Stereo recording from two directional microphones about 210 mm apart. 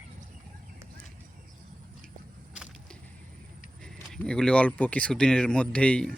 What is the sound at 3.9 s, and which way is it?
Speech, 5° left (ahead or behind).